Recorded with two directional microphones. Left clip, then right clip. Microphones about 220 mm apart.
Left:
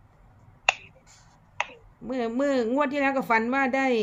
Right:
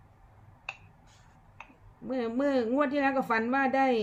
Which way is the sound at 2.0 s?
40° left (ahead or behind).